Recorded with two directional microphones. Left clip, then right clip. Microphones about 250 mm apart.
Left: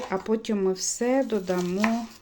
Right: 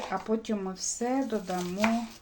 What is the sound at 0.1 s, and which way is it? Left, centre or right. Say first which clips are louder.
Speech: left 5 dB; left.